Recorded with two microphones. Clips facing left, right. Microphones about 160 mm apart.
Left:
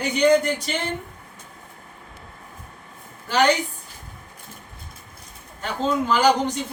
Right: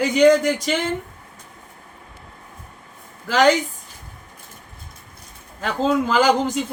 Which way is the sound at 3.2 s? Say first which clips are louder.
Right 3 dB; 90° right.